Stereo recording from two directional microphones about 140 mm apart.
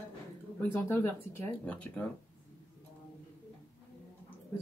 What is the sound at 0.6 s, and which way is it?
Speech, 15° left (ahead or behind).